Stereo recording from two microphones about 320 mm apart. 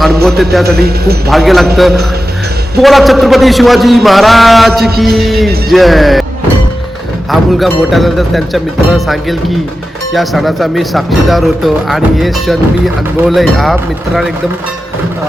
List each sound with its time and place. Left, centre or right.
0.0 s speech: centre
0.8 s speech: right
1.3 s speech: centre
2.8 s speech: centre
7.3 s speech: centre